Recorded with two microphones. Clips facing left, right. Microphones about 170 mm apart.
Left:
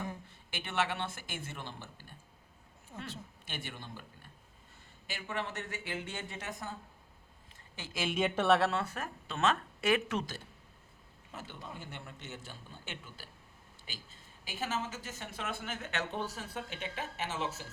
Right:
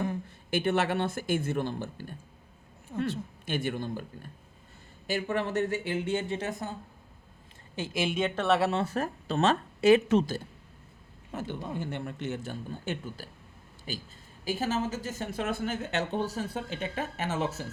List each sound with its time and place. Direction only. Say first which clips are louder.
0.5 s a woman's voice: right 9 dB; 40° right (ahead or behind)
8.1 s speech: even; 5° left (ahead or behind)
8.8 s a woman's voice: right 9 dB; 35° right (ahead or behind)
11.3 s a man's voice: right 11 dB; 55° right (ahead or behind)
12.5 s a woman's voice: right 12 dB; 45° right (ahead or behind)